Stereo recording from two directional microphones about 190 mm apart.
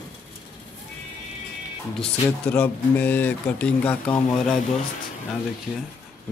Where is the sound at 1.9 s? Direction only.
5° left (ahead or behind).